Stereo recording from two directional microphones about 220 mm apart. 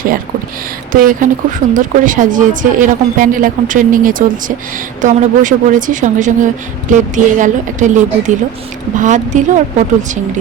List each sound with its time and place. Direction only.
0.9 s speech: 35° right (ahead or behind)